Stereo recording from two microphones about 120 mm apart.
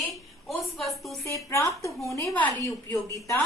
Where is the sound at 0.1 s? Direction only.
Centre (ahead or behind).